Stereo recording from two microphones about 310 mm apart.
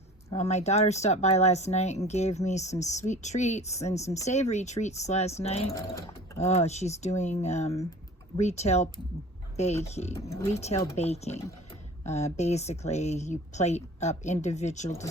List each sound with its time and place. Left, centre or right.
0.3 s speech: left
6.4 s speech: left